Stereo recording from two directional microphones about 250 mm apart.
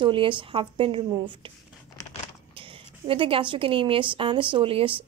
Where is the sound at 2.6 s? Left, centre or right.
Right.